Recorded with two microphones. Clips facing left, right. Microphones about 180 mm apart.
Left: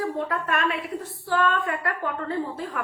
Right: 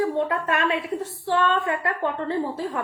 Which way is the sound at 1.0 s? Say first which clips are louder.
Right 1 dB; 25° right (ahead or behind).